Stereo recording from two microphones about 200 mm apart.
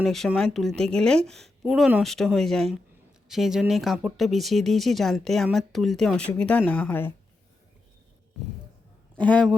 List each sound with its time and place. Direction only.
0.0 s speech: centre (ahead or behind)
9.1 s speech: 5° left (ahead or behind)